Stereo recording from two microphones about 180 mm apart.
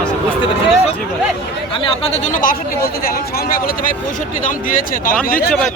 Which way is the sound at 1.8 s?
35° left (ahead or behind).